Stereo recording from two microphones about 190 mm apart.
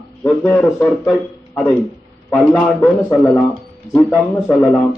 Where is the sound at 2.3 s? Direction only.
5° left (ahead or behind).